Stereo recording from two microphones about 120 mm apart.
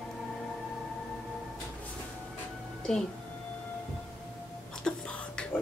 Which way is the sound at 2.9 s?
5° left (ahead or behind).